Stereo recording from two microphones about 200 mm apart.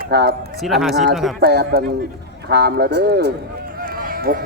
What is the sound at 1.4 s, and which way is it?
Speech, 55° right (ahead or behind).